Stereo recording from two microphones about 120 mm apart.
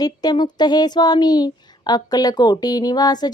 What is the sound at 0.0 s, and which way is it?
Speech, 35° left (ahead or behind).